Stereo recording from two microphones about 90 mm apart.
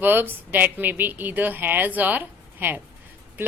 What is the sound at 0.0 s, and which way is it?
A woman's voice, 20° right (ahead or behind).